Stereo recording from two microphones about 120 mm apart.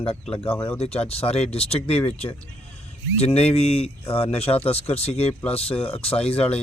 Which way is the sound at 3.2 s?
55° left (ahead or behind).